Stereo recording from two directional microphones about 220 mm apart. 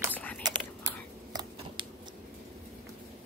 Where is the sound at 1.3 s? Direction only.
20° right (ahead or behind).